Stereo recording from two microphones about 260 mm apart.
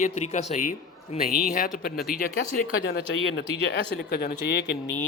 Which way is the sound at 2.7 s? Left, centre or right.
Left.